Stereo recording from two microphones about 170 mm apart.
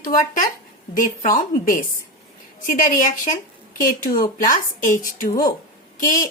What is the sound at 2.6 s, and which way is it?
Speech, 50° left (ahead or behind).